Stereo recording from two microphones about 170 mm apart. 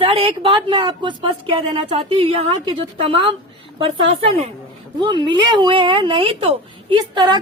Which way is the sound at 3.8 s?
30° right (ahead or behind).